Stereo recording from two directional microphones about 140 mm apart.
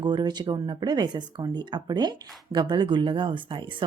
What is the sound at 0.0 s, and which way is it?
Speech, 30° right (ahead or behind).